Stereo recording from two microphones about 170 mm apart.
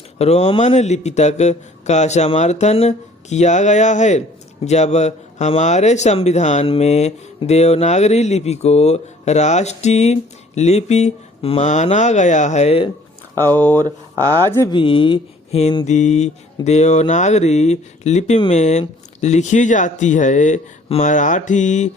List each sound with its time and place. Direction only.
0.2 s speech: 40° left (ahead or behind)
13.3 s speech: 10° left (ahead or behind)
14.7 s speech: 30° left (ahead or behind)